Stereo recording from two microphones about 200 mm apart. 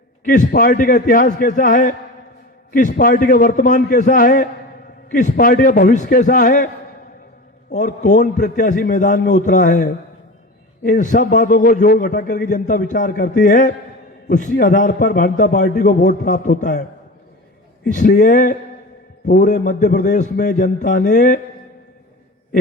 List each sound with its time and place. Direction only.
0.3 s a man's voice: 45° left (ahead or behind)
7.7 s a man's voice: 40° left (ahead or behind)
17.9 s a man's voice: 40° left (ahead or behind)